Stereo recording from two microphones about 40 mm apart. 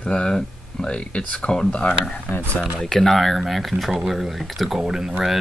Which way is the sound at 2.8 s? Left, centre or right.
Centre.